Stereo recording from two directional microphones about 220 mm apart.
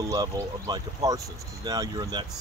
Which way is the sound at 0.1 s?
15° right (ahead or behind).